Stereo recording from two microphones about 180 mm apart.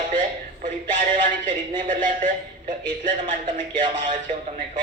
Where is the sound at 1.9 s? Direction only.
45° right (ahead or behind).